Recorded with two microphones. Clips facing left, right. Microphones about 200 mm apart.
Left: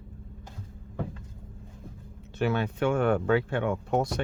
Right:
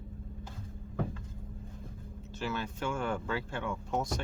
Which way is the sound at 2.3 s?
60° left (ahead or behind).